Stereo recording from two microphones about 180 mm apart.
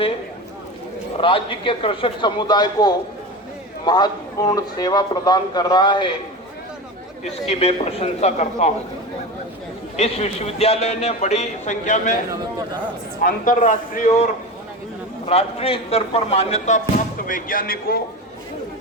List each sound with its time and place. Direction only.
1.2 s a man's voice: 30° left (ahead or behind)
7.3 s speech: 35° left (ahead or behind)
10.0 s speech: 35° left (ahead or behind)
13.2 s a man's voice: 50° left (ahead or behind)
15.3 s speech: 35° left (ahead or behind); by 18.0 s 55° left (ahead or behind)